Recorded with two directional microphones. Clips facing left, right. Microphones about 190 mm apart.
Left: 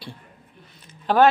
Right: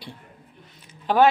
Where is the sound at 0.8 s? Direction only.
15° right (ahead or behind).